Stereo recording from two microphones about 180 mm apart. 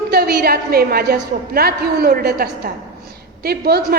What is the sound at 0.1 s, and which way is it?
A woman's voice, 60° right (ahead or behind).